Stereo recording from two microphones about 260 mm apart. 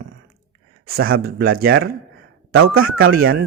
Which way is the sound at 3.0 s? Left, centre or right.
Right.